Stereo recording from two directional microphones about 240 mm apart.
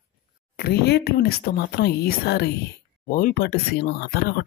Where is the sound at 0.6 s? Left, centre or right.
Left.